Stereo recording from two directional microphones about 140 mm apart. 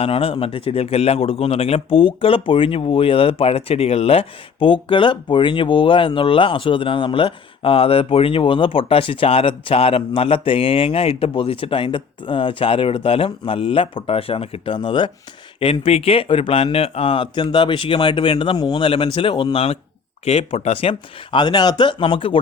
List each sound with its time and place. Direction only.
0.0 s a man's voice: 40° left (ahead or behind)